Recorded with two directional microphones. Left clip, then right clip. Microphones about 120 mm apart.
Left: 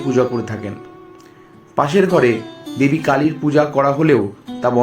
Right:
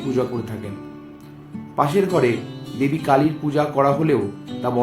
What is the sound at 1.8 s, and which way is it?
Speech, 55° left (ahead or behind).